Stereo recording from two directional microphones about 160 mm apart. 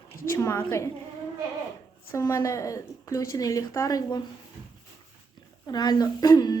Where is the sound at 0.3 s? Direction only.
15° left (ahead or behind).